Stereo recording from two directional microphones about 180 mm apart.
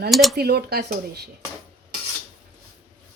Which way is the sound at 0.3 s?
60° right (ahead or behind).